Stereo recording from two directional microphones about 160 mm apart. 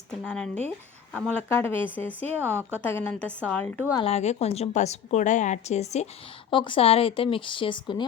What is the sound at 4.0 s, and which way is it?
A woman's voice, 40° left (ahead or behind).